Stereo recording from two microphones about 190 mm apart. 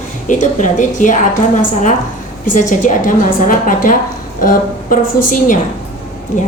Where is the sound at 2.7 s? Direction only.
45° left (ahead or behind).